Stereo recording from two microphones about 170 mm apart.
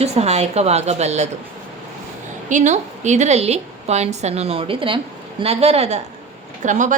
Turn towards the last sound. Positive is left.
turn(degrees=-45)  # may be behind; listen again after turning